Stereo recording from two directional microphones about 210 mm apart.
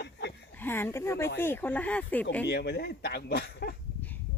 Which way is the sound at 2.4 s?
50° left (ahead or behind).